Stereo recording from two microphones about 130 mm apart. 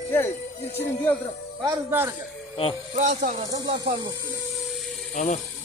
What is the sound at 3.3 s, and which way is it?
Speech, 50° right (ahead or behind).